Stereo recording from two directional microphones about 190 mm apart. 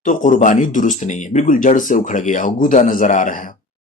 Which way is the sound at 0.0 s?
40° left (ahead or behind).